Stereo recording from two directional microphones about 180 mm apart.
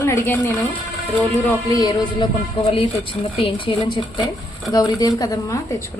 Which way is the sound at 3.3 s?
30° left (ahead or behind).